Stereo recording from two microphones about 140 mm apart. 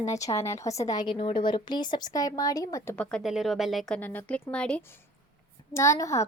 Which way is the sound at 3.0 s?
5° left (ahead or behind).